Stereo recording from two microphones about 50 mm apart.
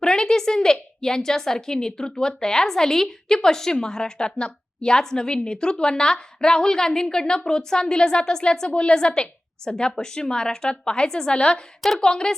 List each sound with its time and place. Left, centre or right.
0.0 s a woman's voice: centre